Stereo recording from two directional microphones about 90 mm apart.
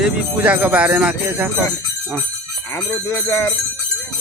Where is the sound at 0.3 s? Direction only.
15° right (ahead or behind).